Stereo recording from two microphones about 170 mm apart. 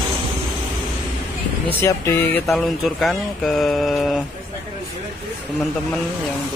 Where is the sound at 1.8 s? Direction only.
15° left (ahead or behind).